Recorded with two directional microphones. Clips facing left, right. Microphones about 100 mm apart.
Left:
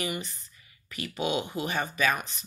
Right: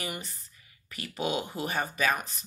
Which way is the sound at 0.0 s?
35° right (ahead or behind).